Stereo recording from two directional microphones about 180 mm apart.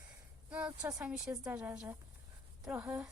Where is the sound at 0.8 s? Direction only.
20° right (ahead or behind).